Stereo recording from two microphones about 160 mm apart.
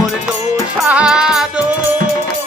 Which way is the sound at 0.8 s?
5° right (ahead or behind).